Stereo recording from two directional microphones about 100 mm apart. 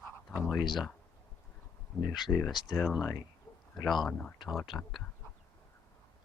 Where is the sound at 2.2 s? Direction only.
Centre (ahead or behind).